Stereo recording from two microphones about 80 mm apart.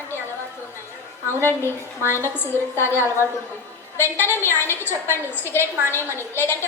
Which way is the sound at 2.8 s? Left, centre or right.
Left.